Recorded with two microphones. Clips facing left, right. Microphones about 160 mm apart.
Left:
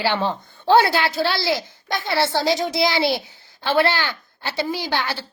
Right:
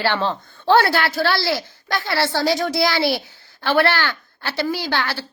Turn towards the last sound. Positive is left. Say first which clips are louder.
# right 1 dB
turn(degrees=20)  # may be behind; listen again after turning